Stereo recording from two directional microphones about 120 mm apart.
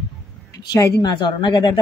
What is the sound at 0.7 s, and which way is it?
Speech, 30° left (ahead or behind).